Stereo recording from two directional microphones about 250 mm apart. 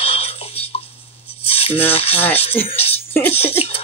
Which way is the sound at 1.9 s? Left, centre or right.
Left.